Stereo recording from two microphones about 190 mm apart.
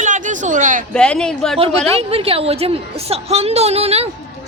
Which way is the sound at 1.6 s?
30° right (ahead or behind).